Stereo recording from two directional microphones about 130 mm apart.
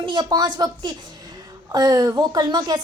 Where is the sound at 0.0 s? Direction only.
35° right (ahead or behind).